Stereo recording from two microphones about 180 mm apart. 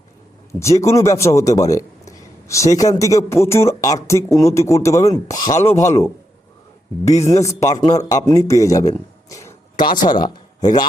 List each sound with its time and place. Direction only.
0.6 s a man's voice: 15° left (ahead or behind)
7.0 s speech: 40° left (ahead or behind)
7.3 s a man's voice: 15° left (ahead or behind)